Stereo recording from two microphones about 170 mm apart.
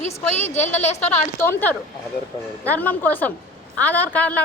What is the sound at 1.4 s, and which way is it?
A woman's voice, 10° left (ahead or behind).